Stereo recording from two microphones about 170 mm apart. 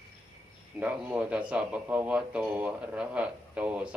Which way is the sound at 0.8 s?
10° right (ahead or behind).